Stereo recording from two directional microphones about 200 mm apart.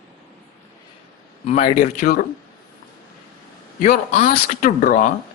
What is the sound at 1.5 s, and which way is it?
Speech, 40° left (ahead or behind).